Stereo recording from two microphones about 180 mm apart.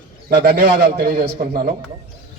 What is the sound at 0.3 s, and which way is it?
A man's voice, 65° right (ahead or behind).